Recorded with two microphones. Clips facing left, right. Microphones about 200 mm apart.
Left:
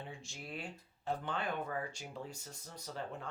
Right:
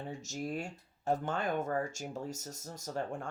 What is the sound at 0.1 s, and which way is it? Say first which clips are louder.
Speech: right 9 dB; 40° right (ahead or behind).